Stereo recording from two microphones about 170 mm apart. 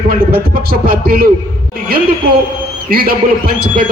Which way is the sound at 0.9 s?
60° right (ahead or behind).